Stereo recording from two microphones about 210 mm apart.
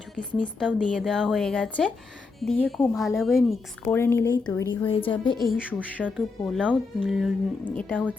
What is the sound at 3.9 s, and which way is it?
A woman's voice, 10° left (ahead or behind).